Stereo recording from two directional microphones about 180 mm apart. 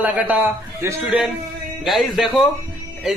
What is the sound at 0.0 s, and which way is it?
A man's voice, 10° right (ahead or behind).